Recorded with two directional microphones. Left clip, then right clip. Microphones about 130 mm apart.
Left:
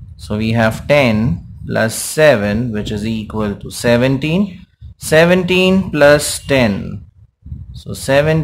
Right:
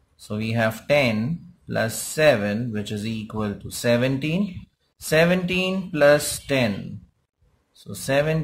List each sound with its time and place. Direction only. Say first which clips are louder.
0.3 s speech: left 8 dB; 25° left (ahead or behind)